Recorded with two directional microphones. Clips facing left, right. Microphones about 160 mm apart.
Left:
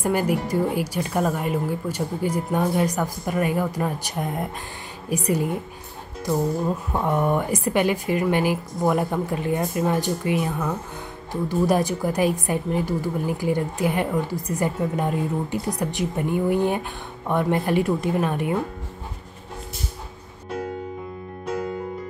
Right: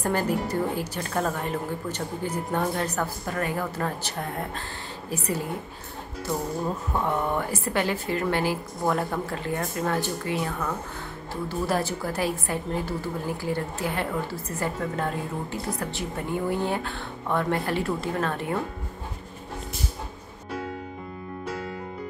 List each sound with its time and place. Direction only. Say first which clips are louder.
0.0 s a woman's voice: left 3 dB; 15° left (ahead or behind)
6.9 s a woman's voice: left 4 dB; 15° left (ahead or behind)